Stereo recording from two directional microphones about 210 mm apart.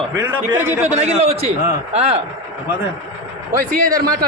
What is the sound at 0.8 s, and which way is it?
A man's voice, 30° right (ahead or behind).